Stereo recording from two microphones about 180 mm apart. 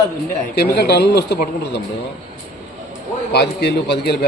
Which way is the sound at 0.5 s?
65° left (ahead or behind).